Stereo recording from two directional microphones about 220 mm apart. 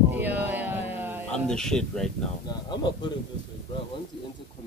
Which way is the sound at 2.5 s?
20° left (ahead or behind).